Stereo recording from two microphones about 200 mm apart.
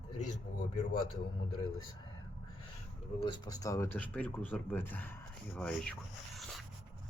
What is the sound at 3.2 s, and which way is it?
Speech, 20° left (ahead or behind).